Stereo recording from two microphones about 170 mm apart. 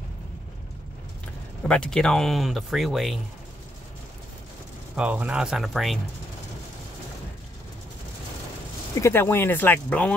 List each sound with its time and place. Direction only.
1.7 s speech: 5° left (ahead or behind)
4.9 s speech: 5° right (ahead or behind)
9.0 s speech: 15° left (ahead or behind)